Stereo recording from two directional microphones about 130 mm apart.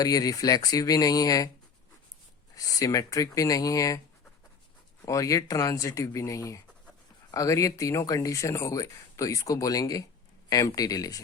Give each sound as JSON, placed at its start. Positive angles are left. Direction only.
{"t": 0.0, "sound": "speech", "side_deg": 30}
{"t": 2.6, "sound": "speech", "side_deg": 25}
{"t": 5.0, "sound": "speech", "side_deg": 25}